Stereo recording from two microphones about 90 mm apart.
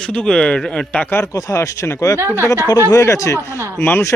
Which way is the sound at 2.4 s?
35° left (ahead or behind).